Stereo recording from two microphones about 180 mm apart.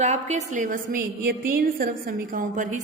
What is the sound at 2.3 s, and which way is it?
Speech, 45° right (ahead or behind).